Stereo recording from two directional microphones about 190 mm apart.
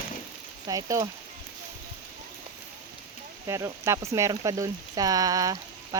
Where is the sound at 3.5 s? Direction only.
15° right (ahead or behind).